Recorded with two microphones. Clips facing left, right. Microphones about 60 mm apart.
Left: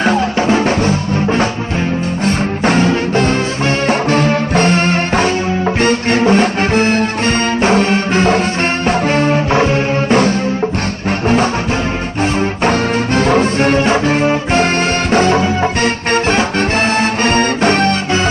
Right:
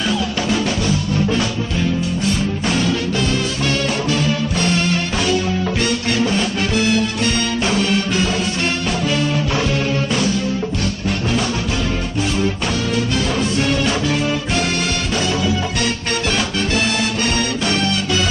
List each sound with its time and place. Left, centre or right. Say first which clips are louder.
0.0 s music: left 7 dB; left
12.6 s music: left 6 dB; left